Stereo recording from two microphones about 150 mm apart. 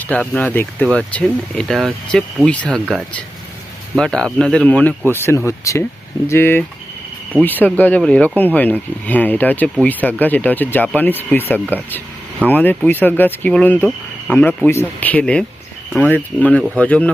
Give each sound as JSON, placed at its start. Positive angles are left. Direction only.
{"t": 0.0, "sound": "speech", "side_deg": 10}